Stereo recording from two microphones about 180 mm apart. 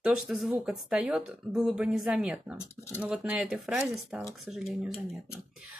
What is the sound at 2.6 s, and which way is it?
Speech, 15° left (ahead or behind).